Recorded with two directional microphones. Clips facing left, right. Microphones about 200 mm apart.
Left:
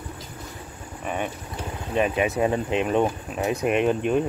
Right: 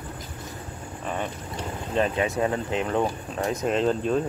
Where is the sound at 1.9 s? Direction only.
15° left (ahead or behind).